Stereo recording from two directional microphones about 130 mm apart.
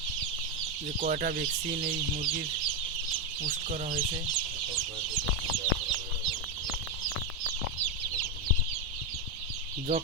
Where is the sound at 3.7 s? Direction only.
80° right.